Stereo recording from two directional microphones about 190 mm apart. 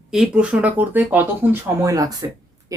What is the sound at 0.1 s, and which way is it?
Speech, 5° right (ahead or behind).